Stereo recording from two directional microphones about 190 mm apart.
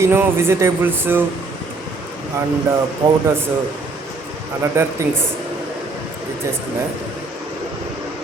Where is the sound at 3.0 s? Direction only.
20° right (ahead or behind).